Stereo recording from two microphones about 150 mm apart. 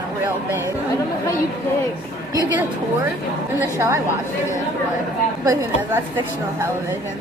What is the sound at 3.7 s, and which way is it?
Speech, 20° right (ahead or behind).